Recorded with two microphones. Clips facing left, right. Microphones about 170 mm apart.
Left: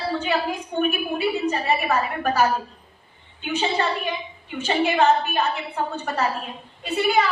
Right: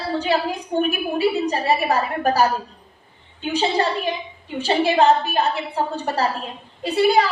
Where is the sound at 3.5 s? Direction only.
35° right (ahead or behind).